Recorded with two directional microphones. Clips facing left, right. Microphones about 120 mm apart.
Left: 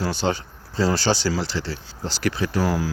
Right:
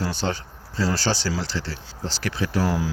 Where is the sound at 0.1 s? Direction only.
15° left (ahead or behind).